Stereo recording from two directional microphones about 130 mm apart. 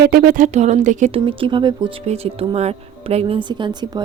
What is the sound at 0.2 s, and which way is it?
Speech, 90° right.